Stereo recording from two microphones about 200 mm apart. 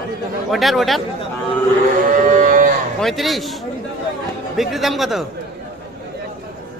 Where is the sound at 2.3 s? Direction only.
40° right (ahead or behind).